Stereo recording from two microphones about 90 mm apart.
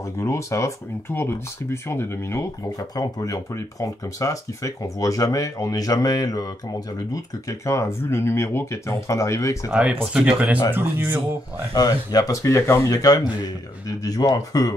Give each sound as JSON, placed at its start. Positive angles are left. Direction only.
{"t": 0.2, "sound": "speech", "side_deg": 35}
{"t": 3.0, "sound": "speech", "side_deg": 40}
{"t": 9.7, "sound": "speech", "side_deg": -10}
{"t": 10.7, "sound": "speech", "side_deg": -25}
{"t": 11.7, "sound": "speech", "side_deg": 45}